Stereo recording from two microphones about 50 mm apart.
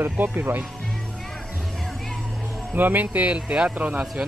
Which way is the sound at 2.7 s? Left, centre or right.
Right.